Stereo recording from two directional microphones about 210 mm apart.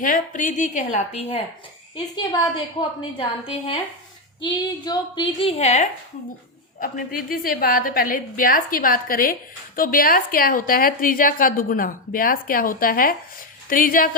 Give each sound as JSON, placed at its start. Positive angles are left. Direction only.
{"t": 0.0, "sound": "a woman's voice", "side_deg": 40}
{"t": 3.0, "sound": "a woman's voice", "side_deg": 25}
{"t": 6.7, "sound": "a woman's voice", "side_deg": 45}